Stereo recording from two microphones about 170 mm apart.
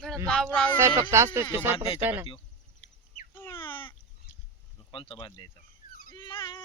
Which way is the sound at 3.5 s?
30° left (ahead or behind).